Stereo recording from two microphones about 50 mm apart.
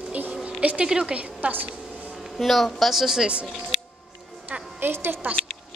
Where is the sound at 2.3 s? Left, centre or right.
Centre.